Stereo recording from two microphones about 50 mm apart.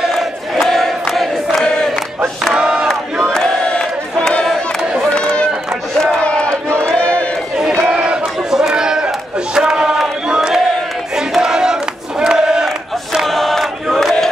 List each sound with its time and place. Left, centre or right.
0.6 s crowd: centre
2.4 s battle cry: centre
3.3 s a sound: centre
5.1 s run: left
6.2 s crowd: left
7.0 s run: left
7.8 s a sound: centre
11.1 s battle cry: centre
12.2 s crowd: centre
12.6 s battle cry: centre